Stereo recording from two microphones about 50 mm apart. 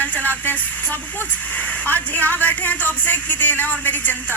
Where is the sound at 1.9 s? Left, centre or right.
Left.